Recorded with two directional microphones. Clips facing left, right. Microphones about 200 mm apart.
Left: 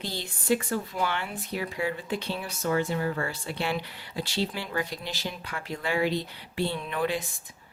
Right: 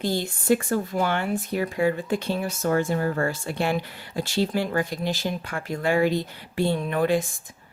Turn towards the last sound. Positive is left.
turn(degrees=-45)  # may be behind; listen again after turning